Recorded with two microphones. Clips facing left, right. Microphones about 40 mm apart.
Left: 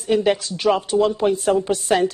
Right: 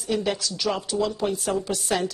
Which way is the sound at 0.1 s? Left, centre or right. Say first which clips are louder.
Left 7 dB; left.